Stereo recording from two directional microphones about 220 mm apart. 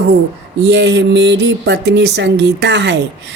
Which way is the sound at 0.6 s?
50° right (ahead or behind).